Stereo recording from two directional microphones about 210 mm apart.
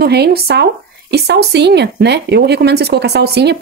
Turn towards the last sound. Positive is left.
turn(degrees=-50)  # may be behind; listen again after turning